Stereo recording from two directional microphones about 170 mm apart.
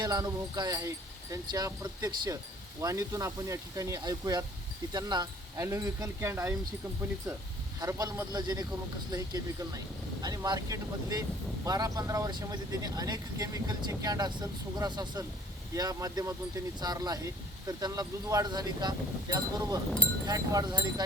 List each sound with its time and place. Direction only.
0.0 s speech: 20° right (ahead or behind)
7.8 s speech: 20° right (ahead or behind)